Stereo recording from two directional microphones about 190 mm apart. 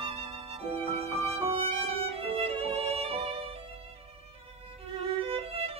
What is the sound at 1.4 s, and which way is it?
Violin, 30° right (ahead or behind).